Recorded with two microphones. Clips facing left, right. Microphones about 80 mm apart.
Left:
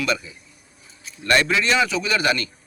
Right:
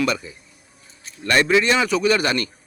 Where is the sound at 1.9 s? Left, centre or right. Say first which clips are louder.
Right 3 dB; right.